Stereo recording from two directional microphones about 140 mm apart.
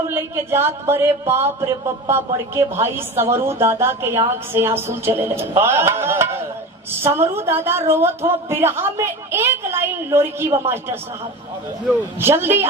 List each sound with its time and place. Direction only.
0.1 s speech: 15° right (ahead or behind)
12.2 s speech: 15° right (ahead or behind)